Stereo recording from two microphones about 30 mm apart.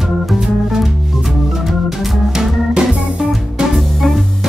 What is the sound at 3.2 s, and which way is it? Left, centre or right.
Music, right.